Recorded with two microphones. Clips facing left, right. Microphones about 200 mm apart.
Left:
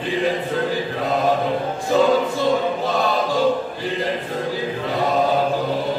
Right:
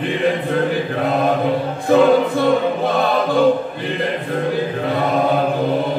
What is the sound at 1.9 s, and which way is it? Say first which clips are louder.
Music: right 5 dB; 55° right (ahead or behind).